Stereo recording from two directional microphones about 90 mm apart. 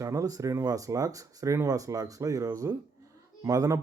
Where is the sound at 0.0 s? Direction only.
35° right (ahead or behind).